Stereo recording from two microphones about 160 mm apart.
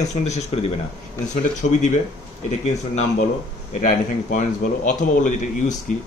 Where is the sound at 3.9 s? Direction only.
55° left (ahead or behind).